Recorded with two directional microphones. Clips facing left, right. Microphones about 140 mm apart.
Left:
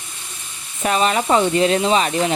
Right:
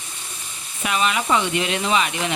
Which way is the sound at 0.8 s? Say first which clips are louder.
Left 4 dB; 40° left (ahead or behind).